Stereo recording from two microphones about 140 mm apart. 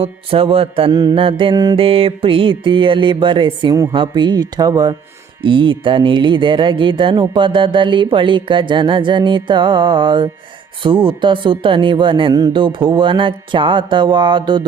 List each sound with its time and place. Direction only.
0.0 s speech: 40° right (ahead or behind)